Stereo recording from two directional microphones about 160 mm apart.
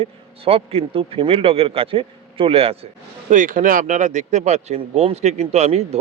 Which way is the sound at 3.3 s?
55° right (ahead or behind).